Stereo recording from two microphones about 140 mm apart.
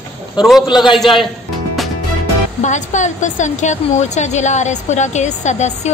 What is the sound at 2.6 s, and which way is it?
A woman's voice, 60° left (ahead or behind).